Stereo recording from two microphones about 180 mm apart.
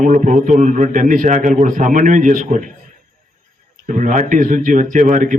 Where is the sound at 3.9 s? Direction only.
45° right (ahead or behind).